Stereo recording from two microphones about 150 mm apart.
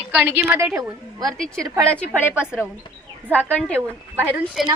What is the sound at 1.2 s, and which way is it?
A woman's voice, 5° left (ahead or behind).